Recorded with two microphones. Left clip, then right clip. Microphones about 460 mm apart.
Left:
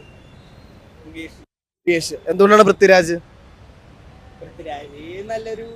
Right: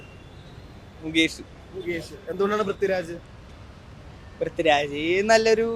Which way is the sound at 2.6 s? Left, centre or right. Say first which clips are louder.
Left 14 dB; left.